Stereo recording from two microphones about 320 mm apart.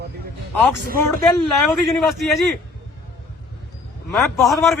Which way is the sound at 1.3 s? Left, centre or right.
Centre.